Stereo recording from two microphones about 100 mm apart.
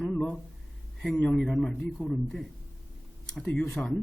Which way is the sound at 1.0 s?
10° left (ahead or behind).